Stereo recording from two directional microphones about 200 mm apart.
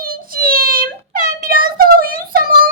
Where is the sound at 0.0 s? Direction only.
45° right (ahead or behind).